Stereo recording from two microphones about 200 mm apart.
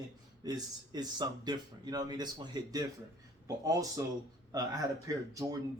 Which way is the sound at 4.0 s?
15° right (ahead or behind).